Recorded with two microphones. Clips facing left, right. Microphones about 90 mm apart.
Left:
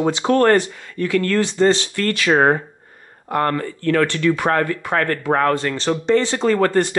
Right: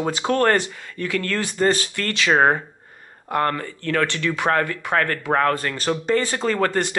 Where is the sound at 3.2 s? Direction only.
30° left (ahead or behind).